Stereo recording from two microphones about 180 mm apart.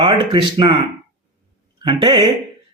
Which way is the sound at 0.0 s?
30° right (ahead or behind).